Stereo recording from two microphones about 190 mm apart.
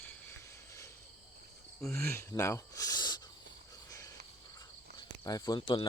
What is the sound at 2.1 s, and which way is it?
Speech, 15° left (ahead or behind).